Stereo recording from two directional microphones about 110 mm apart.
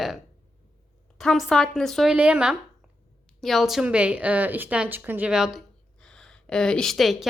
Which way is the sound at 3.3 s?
Centre (ahead or behind).